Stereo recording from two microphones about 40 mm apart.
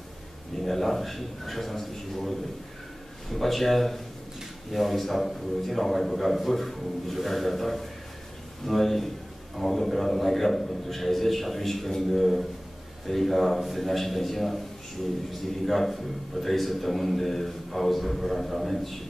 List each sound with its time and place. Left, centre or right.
0.6 s speech: centre
15.6 s speech: centre